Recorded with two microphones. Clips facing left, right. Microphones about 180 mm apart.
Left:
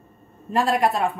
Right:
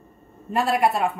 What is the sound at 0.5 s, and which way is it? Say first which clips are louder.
Speech: even; centre (ahead or behind).